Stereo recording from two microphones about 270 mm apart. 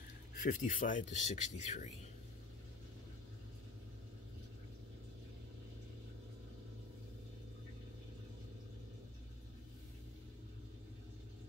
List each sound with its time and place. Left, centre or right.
0.4 s speech: left